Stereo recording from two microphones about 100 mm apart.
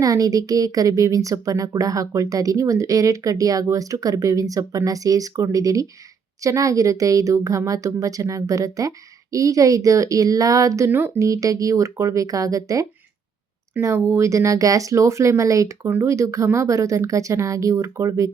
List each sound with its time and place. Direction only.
0.0 s speech: 35° right (ahead or behind)